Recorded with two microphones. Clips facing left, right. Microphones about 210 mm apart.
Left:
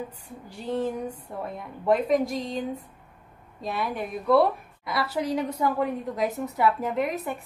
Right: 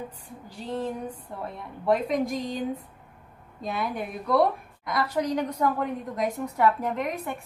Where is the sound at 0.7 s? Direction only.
10° left (ahead or behind).